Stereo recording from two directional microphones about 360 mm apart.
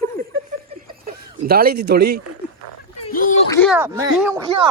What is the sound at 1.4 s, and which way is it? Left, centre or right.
Speech, right.